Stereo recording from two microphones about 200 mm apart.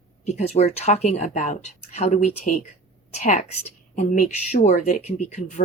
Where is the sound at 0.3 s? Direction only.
35° left (ahead or behind).